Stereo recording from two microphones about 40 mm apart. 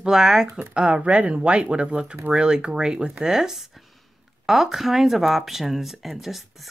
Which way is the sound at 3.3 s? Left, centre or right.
Centre.